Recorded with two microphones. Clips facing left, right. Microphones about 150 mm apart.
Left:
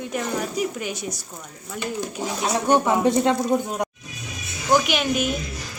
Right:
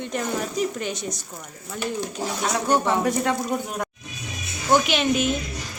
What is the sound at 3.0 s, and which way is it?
Speech, 25° left (ahead or behind).